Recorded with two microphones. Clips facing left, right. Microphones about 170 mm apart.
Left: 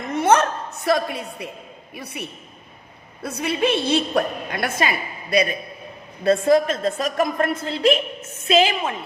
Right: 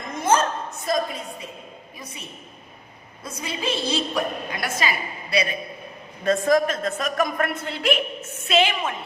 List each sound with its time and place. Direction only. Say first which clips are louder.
0.1 s a sound: left 4 dB; 65° left (ahead or behind)
2.0 s a woman's voice: left 8 dB; 65° left (ahead or behind)
3.2 s a woman's voice: left 7 dB; 65° left (ahead or behind); by 5.5 s 45° left (ahead or behind)
6.2 s a woman's voice: left 3 dB; 30° left (ahead or behind)